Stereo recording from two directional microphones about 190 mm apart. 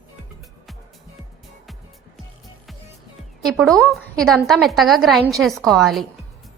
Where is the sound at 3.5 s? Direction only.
Centre (ahead or behind).